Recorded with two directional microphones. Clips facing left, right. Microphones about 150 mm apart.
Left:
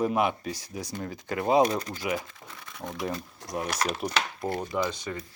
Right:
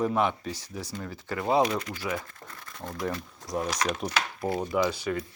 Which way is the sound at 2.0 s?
20° left (ahead or behind).